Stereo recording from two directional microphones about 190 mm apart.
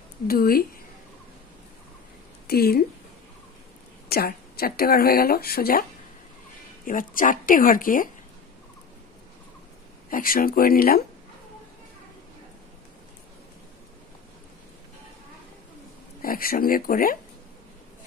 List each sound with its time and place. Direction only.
0.3 s speech: 50° left (ahead or behind)
2.4 s speech: 55° left (ahead or behind)
4.1 s speech: 55° left (ahead or behind)
10.0 s speech: 50° left (ahead or behind)
16.2 s speech: 50° left (ahead or behind)